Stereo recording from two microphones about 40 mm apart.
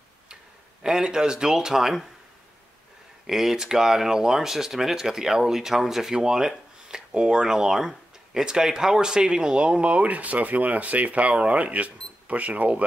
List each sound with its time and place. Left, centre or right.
0.8 s speech: centre
3.3 s speech: centre; by 12.8 s right